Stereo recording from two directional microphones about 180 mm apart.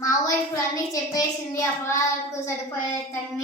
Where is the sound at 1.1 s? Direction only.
15° left (ahead or behind).